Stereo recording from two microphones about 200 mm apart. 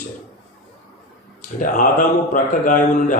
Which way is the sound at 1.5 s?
40° left (ahead or behind).